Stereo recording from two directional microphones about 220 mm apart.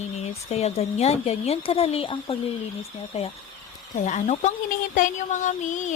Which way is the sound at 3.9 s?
30° left (ahead or behind).